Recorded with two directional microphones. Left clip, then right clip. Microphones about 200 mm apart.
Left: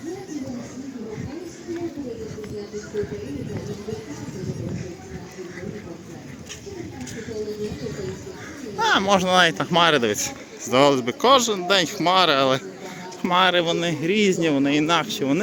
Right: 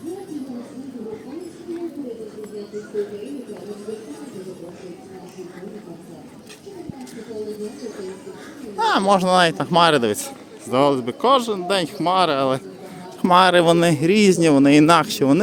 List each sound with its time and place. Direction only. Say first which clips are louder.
8.8 s speech: right 2 dB; 15° right (ahead or behind)
13.2 s speech: right 5 dB; 30° right (ahead or behind)